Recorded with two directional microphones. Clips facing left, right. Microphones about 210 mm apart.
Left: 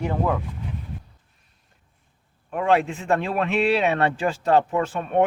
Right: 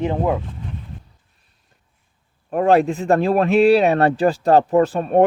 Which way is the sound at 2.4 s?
40° right (ahead or behind).